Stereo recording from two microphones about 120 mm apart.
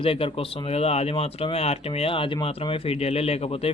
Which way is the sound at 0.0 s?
50° left (ahead or behind).